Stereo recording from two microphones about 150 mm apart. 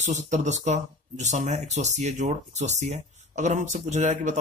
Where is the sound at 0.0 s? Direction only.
50° right (ahead or behind).